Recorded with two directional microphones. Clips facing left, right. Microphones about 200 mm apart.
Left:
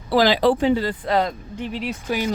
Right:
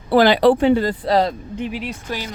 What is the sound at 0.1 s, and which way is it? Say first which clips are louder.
Speech: right 4 dB; 55° right (ahead or behind).